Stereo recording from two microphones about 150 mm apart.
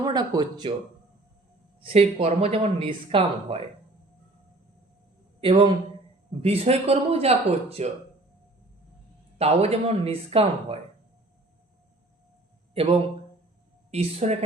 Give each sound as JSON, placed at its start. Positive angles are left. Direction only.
{"t": 0.0, "sound": "speech", "side_deg": -25}
{"t": 1.8, "sound": "speech", "side_deg": -40}
{"t": 5.4, "sound": "a man's voice", "side_deg": -35}
{"t": 9.4, "sound": "speech", "side_deg": -45}
{"t": 12.7, "sound": "speech", "side_deg": -40}